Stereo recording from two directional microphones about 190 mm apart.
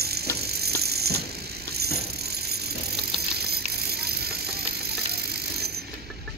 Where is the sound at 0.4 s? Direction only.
55° right (ahead or behind).